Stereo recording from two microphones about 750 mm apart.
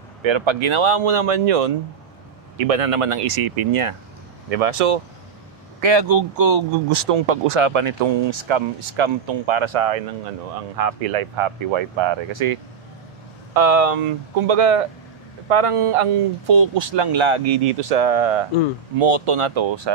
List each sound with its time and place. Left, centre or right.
0.2 s speech: right
4.5 s speech: right
5.8 s speech: right